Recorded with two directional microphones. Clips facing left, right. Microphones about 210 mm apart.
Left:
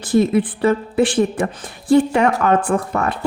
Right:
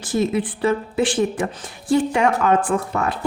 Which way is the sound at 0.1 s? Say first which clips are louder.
Left 5 dB; 55° left (ahead or behind).